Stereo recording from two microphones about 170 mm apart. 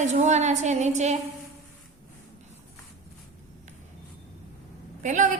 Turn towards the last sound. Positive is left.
turn(degrees=-45)  # may be behind; listen again after turning